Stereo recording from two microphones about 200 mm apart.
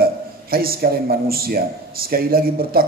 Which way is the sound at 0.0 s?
50° right (ahead or behind).